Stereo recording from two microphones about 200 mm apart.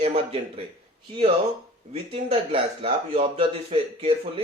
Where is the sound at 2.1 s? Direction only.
25° right (ahead or behind).